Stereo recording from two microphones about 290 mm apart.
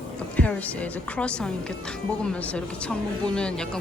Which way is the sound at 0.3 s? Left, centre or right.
Centre.